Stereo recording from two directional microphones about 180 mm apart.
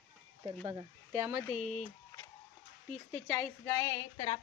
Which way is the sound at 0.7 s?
20° right (ahead or behind).